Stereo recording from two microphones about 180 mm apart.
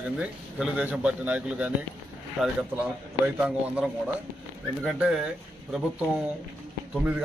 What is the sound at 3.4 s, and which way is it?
Speech, 5° right (ahead or behind).